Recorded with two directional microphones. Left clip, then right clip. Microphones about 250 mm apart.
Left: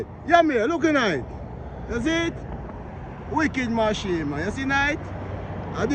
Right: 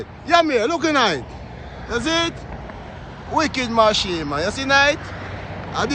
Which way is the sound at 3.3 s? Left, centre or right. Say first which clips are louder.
Right 4 dB; left.